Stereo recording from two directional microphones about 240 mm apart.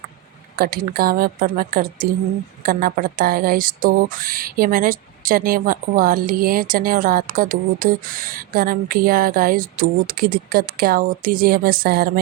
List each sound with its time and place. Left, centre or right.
0.5 s speech: right